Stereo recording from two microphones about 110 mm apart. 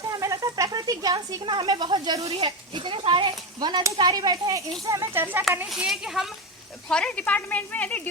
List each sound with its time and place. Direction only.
0.1 s a sound: 30° right (ahead or behind)
2.4 s speech: 50° right (ahead or behind); by 4.6 s 35° right (ahead or behind)
4.9 s speech: 25° right (ahead or behind)
5.6 s speech: centre (ahead or behind)
6.8 s speech: 10° left (ahead or behind)